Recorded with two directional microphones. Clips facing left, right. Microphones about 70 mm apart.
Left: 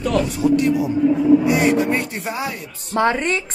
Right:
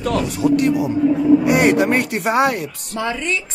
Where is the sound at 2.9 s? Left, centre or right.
Left.